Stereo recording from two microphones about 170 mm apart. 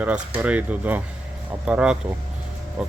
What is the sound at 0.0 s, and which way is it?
Speech, 10° right (ahead or behind).